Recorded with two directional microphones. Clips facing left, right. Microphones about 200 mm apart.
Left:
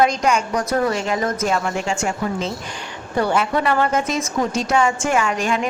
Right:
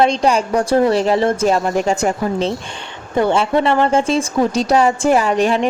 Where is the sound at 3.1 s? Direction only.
25° right (ahead or behind).